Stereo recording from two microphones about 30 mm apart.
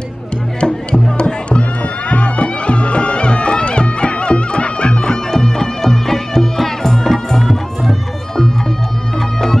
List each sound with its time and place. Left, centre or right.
0.6 s music: left; by 7.9 s centre